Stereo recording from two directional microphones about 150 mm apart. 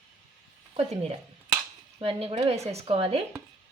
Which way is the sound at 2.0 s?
40° right (ahead or behind).